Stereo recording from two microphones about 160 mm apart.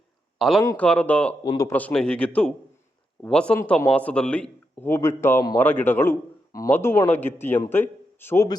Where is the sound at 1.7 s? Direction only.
10° left (ahead or behind).